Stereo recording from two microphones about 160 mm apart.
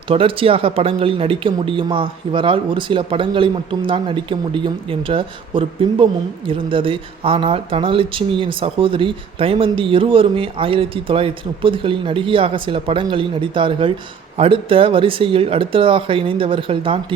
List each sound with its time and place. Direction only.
0.1 s speech: 35° right (ahead or behind)